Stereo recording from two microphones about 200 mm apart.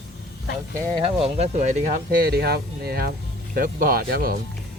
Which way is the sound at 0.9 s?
30° right (ahead or behind).